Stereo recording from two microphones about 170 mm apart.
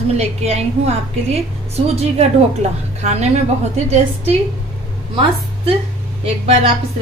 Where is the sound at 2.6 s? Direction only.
40° right (ahead or behind).